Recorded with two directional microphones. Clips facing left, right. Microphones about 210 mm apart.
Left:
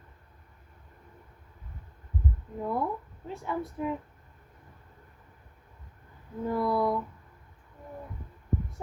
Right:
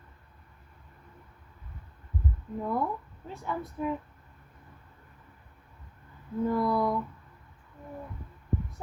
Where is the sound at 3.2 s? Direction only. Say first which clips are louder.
Left 2 dB; 20° left (ahead or behind).